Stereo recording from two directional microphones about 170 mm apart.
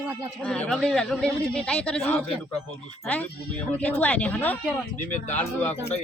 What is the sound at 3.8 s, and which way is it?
A man's voice, 10° left (ahead or behind).